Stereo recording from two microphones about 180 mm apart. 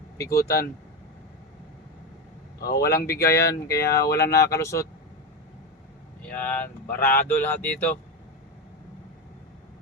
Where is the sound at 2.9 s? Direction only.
15° left (ahead or behind).